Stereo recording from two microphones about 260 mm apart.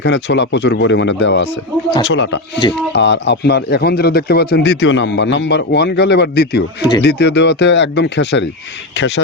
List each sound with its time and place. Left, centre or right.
0.0 s speech: left